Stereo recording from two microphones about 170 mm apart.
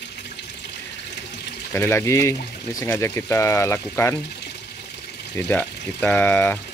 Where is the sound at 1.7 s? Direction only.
15° left (ahead or behind).